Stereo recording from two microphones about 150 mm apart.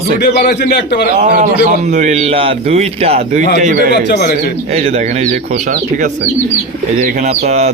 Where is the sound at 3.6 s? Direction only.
60° right (ahead or behind).